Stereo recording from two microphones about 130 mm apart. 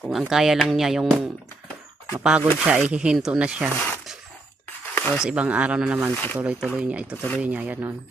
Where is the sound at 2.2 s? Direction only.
5° right (ahead or behind).